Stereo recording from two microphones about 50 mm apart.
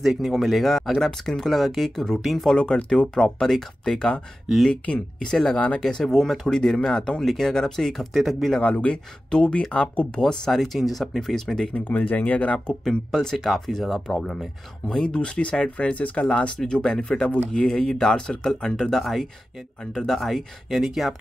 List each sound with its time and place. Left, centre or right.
0.0 s speech: centre
2.5 s speech: centre
4.5 s speech: centre
5.2 s speech: centre
8.1 s speech: centre
8.5 s speech: left
10.2 s speech: centre
12.1 s speech: left; by 14.1 s centre
14.1 s speech: centre
18.9 s speech: centre